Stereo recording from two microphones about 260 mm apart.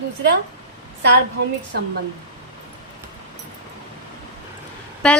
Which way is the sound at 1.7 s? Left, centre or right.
Right.